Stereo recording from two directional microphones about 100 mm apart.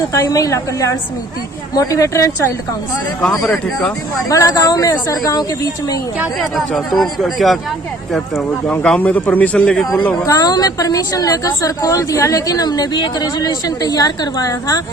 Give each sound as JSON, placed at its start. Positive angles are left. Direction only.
{"t": 0.1, "sound": "a woman's voice", "side_deg": 35}
{"t": 3.4, "sound": "speech", "side_deg": 5}
{"t": 4.3, "sound": "a woman's voice", "side_deg": 35}
{"t": 6.6, "sound": "speech", "side_deg": 0}
{"t": 10.2, "sound": "a woman's voice", "side_deg": 40}